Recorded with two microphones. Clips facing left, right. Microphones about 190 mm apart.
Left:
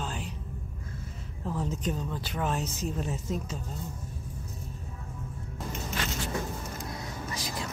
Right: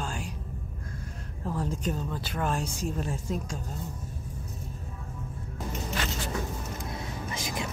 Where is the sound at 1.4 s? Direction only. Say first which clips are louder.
Right 1 dB; 5° right (ahead or behind).